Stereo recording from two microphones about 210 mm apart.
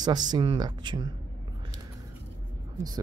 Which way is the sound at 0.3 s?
20° right (ahead or behind).